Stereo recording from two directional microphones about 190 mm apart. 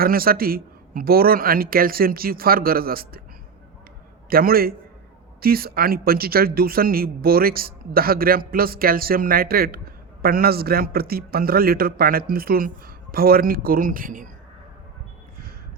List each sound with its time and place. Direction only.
0.0 s speech: 50° right (ahead or behind)
4.3 s speech: 50° right (ahead or behind)